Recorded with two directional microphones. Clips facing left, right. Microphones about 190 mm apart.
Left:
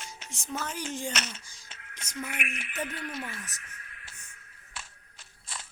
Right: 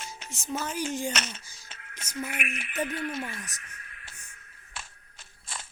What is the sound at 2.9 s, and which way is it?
Speech, 25° right (ahead or behind).